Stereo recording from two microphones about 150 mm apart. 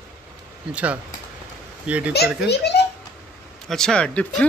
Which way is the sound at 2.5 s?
90° left.